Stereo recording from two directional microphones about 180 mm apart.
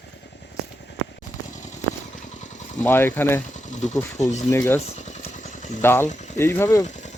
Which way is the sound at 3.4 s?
45° left (ahead or behind).